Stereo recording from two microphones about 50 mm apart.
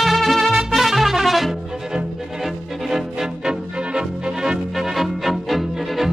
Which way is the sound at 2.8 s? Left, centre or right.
Centre.